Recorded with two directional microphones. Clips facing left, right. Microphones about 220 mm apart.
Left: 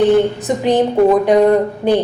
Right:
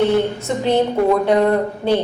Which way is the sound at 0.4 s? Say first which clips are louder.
Left 3 dB; 15° left (ahead or behind).